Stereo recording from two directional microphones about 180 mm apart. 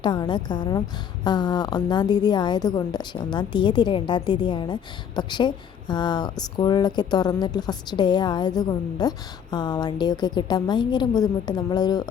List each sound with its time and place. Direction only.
0.0 s a woman's voice: 25° left (ahead or behind)